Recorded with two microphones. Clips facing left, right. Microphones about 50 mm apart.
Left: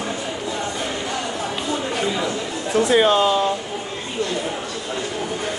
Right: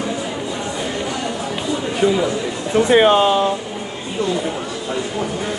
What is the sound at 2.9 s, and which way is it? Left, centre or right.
Speech, right.